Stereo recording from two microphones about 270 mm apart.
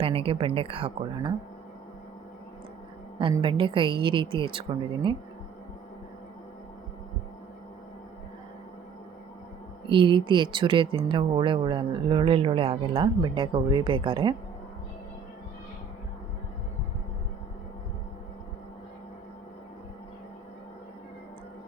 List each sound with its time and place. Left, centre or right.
0.0 s speech: centre
3.2 s speech: centre
9.9 s speech: centre